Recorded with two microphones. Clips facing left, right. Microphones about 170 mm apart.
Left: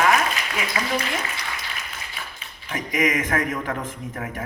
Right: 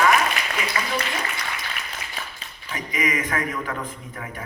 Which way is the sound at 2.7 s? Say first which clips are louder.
Left 3 dB; 50° left (ahead or behind).